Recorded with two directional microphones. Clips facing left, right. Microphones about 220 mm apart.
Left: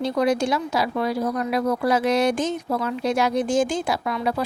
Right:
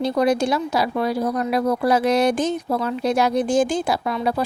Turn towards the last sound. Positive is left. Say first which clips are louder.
# right 2 dB
turn(degrees=-35)  # may be behind; listen again after turning